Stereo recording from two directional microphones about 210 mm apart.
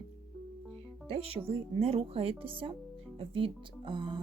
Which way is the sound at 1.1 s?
25° right (ahead or behind).